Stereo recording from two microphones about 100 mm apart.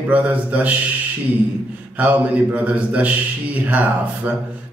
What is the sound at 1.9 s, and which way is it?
Speech, 15° right (ahead or behind).